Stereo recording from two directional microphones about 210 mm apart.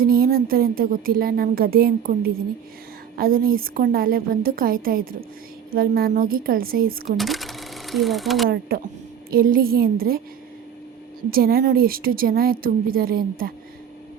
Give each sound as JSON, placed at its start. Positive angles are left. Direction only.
{"t": 0.0, "sound": "speech", "side_deg": -45}
{"t": 7.2, "sound": "speech", "side_deg": 0}
{"t": 8.4, "sound": "speech", "side_deg": -45}
{"t": 11.3, "sound": "speech", "side_deg": -45}